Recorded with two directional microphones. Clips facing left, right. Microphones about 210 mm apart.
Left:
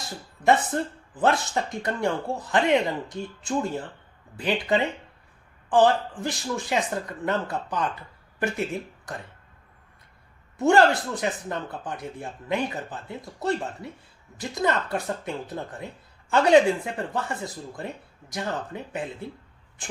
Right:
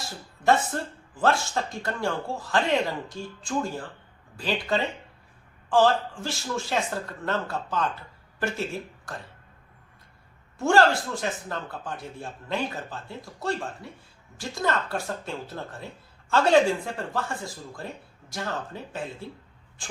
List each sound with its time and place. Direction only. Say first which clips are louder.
0.4 s speech: left 2 dB; 20° left (ahead or behind)
10.6 s speech: left 2 dB; 20° left (ahead or behind)